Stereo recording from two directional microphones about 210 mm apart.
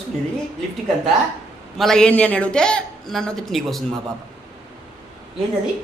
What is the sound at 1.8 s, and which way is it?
Speech, 5° left (ahead or behind).